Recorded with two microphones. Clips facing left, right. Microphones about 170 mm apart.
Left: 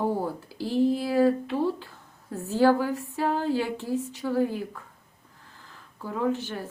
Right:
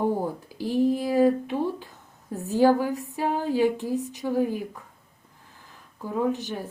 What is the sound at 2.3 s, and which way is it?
Speech, 15° right (ahead or behind).